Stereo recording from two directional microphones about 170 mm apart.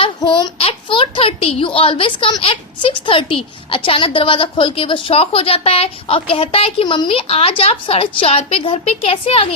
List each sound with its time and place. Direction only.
0.2 s a child's voice: 30° left (ahead or behind)